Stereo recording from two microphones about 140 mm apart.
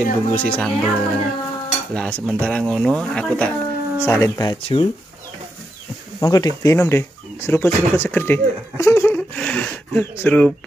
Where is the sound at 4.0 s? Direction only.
20° left (ahead or behind).